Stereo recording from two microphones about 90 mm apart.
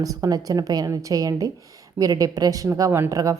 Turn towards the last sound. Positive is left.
turn(degrees=-35)  # may be behind; listen again after turning